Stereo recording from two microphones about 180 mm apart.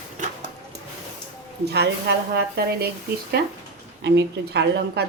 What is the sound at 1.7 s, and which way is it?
A woman's voice, 65° right (ahead or behind).